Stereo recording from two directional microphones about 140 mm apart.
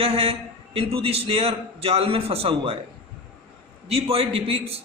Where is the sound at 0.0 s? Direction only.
45° right (ahead or behind).